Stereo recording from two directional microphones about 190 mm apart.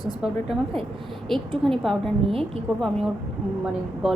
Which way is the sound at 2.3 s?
30° right (ahead or behind).